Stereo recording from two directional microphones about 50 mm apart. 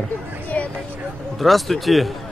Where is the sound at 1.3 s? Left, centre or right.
Centre.